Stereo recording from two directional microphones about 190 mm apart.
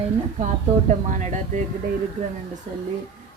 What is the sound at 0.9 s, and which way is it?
Speech, 40° right (ahead or behind).